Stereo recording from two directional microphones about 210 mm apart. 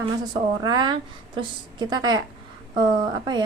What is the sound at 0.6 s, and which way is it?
A woman's voice, 20° right (ahead or behind).